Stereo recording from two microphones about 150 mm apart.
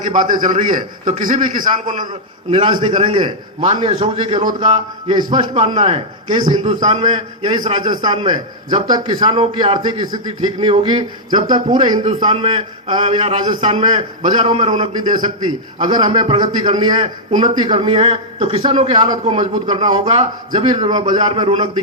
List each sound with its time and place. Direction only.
0.0 s a man's voice: 60° right (ahead or behind)
2.5 s a man's voice: 35° right (ahead or behind)
6.7 s a man's voice: 55° right (ahead or behind)
6.9 s a man's voice: 35° right (ahead or behind)
9.3 s a man's voice: 40° right (ahead or behind)
13.4 s a man's voice: 30° right (ahead or behind)
15.4 s a man's voice: 30° right (ahead or behind)
20.9 s a man's voice: 30° right (ahead or behind)